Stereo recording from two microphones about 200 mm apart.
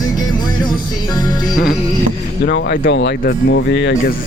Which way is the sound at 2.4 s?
50° left (ahead or behind).